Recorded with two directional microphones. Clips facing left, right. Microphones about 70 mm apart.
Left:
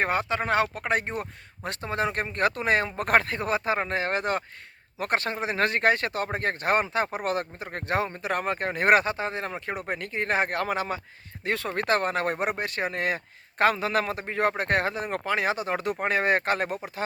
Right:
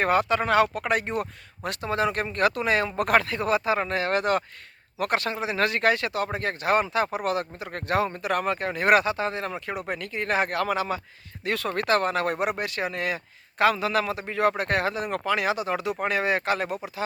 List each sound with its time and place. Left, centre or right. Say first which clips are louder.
0.0 s speech: right 4 dB; left